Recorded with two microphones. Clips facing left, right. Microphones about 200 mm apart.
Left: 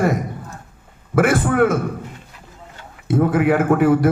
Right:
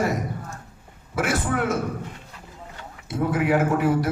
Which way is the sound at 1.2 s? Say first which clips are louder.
Left 9 dB; 55° left (ahead or behind).